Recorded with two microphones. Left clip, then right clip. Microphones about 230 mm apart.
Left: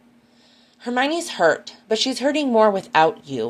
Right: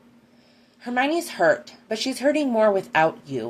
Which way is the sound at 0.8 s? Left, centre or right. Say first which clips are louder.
Left 2 dB; left.